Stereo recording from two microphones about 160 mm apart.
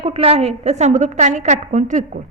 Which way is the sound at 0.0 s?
35° right (ahead or behind).